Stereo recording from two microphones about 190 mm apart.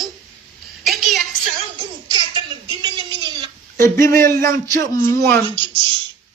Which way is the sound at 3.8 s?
15° left (ahead or behind).